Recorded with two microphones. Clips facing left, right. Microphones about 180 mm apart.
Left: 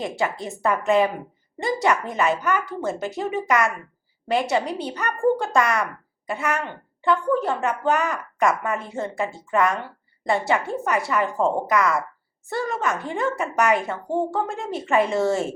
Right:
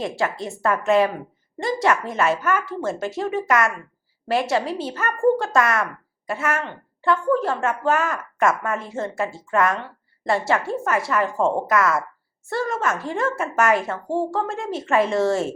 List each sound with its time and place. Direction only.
0.0 s speech: centre (ahead or behind)